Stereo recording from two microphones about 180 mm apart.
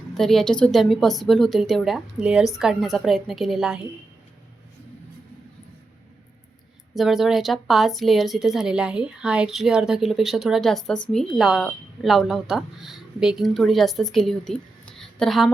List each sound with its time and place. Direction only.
0.1 s a woman's voice: centre (ahead or behind)
6.9 s a woman's voice: centre (ahead or behind)